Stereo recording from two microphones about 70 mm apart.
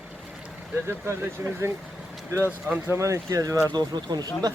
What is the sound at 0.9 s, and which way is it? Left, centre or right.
Speech, right.